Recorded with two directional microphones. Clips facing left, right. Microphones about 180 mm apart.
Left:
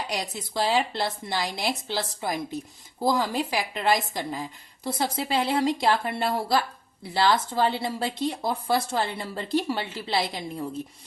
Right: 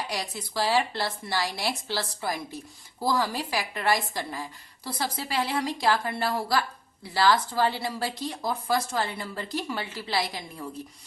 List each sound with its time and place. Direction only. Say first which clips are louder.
0.1 s a woman's voice: left 2 dB; 20° left (ahead or behind)